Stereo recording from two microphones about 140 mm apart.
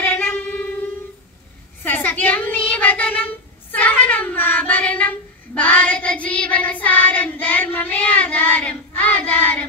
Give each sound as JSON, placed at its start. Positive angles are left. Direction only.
{"t": 0.0, "sound": "a sound", "side_deg": 15}
{"t": 1.8, "sound": "child singing", "side_deg": 15}
{"t": 3.7, "sound": "cat", "side_deg": 10}